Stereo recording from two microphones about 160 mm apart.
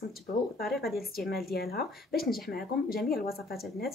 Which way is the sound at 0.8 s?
Centre (ahead or behind).